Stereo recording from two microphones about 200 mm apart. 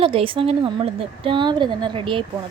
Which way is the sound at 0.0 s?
25° right (ahead or behind).